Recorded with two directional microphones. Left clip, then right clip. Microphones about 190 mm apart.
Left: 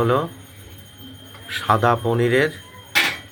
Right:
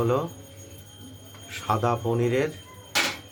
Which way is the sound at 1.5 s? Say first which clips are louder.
Left 8 dB; 15° left (ahead or behind).